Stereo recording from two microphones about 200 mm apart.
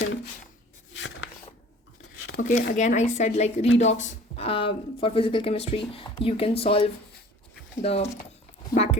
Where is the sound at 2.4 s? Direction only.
45° left (ahead or behind).